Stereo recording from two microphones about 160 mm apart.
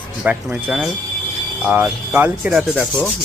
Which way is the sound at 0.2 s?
10° right (ahead or behind).